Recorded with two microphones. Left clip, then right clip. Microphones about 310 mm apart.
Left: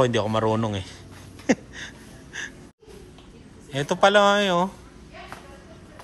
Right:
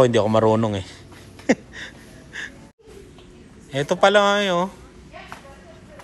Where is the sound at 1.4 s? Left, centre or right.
Centre.